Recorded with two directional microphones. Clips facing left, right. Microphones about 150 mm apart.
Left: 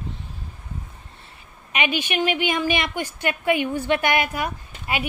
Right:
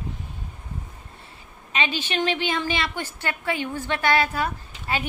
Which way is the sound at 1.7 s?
15° left (ahead or behind).